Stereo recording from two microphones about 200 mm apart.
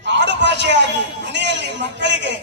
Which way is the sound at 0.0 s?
60° right (ahead or behind).